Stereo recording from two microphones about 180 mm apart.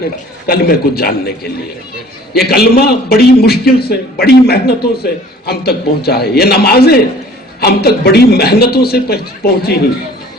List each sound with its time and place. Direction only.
0.4 s a man's voice: 60° left (ahead or behind)
2.3 s a man's voice: 60° left (ahead or behind)